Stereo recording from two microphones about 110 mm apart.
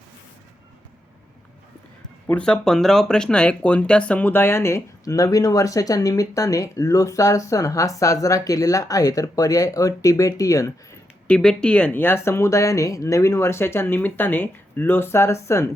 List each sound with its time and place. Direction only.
2.2 s speech: 10° left (ahead or behind); by 10.7 s 30° left (ahead or behind)
11.3 s speech: 5° left (ahead or behind); by 15.7 s 25° left (ahead or behind)